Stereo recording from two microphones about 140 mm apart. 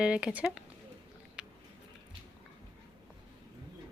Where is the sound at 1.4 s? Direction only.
5° right (ahead or behind).